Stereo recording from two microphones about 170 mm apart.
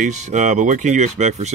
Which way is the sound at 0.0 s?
45° right (ahead or behind).